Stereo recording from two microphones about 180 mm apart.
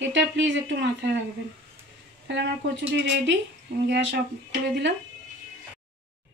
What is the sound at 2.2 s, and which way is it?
Speech, 75° right (ahead or behind).